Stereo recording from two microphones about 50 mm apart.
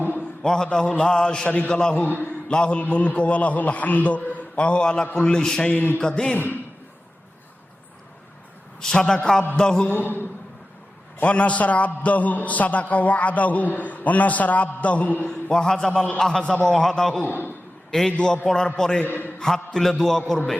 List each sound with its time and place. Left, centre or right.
0.4 s a man's voice: centre
1.5 s a man's voice: left
1.7 s a man's voice: centre
5.6 s a man's voice: left
6.0 s a man's voice: centre
6.3 s a man's voice: left
8.8 s a man's voice: centre
9.9 s a man's voice: left
11.2 s a man's voice: left
15.3 s a man's voice: centre
15.9 s a man's voice: left
16.1 s a man's voice: centre